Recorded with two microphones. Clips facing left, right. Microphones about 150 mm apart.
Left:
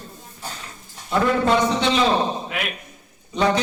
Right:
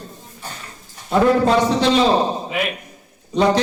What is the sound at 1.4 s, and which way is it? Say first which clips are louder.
Speech: right 3 dB; 35° right (ahead or behind).